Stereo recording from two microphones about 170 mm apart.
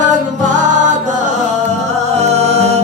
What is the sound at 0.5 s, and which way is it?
Music, 45° right (ahead or behind).